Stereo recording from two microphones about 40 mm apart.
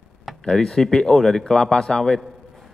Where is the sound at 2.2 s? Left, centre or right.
Centre.